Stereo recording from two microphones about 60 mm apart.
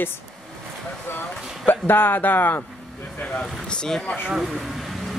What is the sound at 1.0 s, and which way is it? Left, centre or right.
Speech, left.